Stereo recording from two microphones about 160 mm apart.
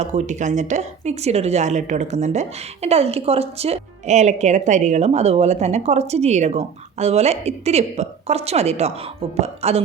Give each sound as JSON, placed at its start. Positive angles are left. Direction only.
{"t": 0.0, "sound": "a woman's voice", "side_deg": -45}